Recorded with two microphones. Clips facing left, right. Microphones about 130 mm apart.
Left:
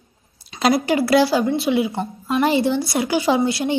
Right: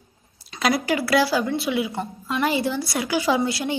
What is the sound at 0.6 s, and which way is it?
A woman's voice, 25° left (ahead or behind).